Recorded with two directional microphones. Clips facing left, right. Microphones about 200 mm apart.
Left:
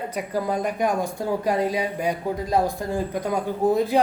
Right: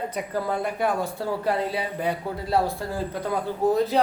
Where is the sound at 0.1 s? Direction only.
10° left (ahead or behind).